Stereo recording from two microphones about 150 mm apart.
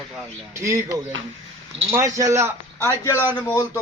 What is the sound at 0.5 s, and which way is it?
A man's voice, 20° right (ahead or behind).